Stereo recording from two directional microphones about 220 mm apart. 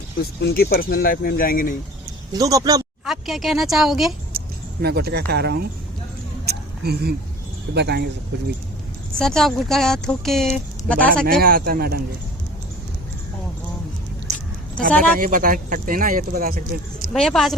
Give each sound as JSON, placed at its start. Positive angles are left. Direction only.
{"t": 0.4, "sound": "speech", "side_deg": 45}
{"t": 2.4, "sound": "speech", "side_deg": -15}
{"t": 3.1, "sound": "speech", "side_deg": 0}
{"t": 4.3, "sound": "speech", "side_deg": -45}
{"t": 6.4, "sound": "a sound", "side_deg": -45}
{"t": 7.7, "sound": "speech", "side_deg": -50}
{"t": 9.1, "sound": "speech", "side_deg": 0}
{"t": 11.1, "sound": "speech", "side_deg": -40}
{"t": 14.8, "sound": "speech", "side_deg": -35}
{"t": 17.2, "sound": "speech", "side_deg": 0}